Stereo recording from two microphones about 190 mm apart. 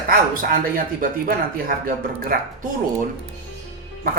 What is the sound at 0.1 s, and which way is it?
Speech, 50° right (ahead or behind).